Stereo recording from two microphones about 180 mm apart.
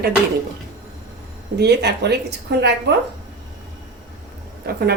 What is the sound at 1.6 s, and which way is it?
A woman's voice, 65° right (ahead or behind).